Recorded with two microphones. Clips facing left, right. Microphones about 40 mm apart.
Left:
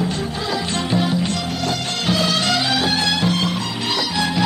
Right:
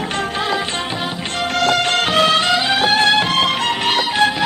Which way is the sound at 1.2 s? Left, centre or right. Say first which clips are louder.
Right 5 dB; right.